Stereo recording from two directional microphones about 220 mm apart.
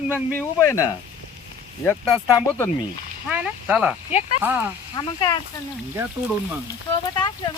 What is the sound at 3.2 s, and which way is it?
Speech, 5° right (ahead or behind).